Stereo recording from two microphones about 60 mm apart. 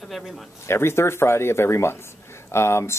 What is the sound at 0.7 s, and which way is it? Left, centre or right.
Speech, left.